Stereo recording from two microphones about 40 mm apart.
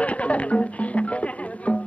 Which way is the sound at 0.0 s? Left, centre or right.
Left.